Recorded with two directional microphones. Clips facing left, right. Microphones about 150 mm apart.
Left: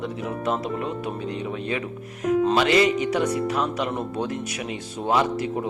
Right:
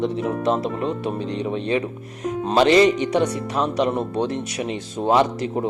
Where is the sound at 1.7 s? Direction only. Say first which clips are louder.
Right 5 dB; 35° right (ahead or behind).